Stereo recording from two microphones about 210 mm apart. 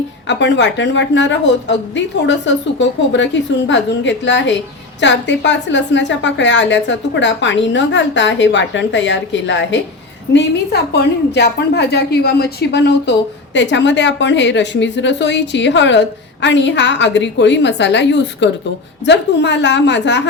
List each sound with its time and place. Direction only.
0.3 s a woman's voice: 60° left (ahead or behind)